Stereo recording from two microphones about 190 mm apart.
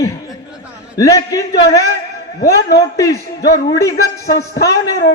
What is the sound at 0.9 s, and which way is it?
Speech, 15° left (ahead or behind).